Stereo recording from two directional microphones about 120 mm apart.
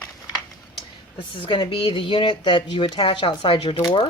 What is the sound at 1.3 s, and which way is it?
Speech, 45° left (ahead or behind).